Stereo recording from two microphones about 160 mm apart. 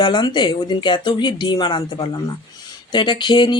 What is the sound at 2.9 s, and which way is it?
Speech, 30° left (ahead or behind).